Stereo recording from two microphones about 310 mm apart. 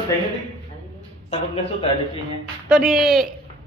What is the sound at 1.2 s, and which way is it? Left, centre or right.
Speech, centre.